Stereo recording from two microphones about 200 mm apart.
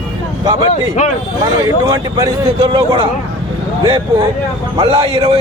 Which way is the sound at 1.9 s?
20° right (ahead or behind).